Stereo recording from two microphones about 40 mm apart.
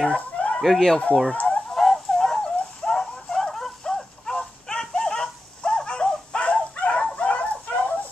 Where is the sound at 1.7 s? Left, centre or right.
Centre.